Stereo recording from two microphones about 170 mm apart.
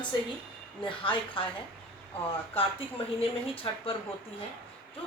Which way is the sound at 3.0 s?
35° left (ahead or behind).